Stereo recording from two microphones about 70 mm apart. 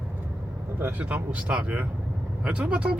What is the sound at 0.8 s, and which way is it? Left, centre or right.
Speech, right.